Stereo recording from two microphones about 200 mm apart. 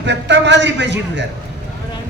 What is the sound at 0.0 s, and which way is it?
A man's voice, 60° right (ahead or behind).